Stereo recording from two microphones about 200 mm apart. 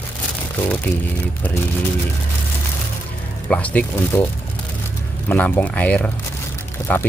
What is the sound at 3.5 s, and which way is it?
Speech, 5° left (ahead or behind).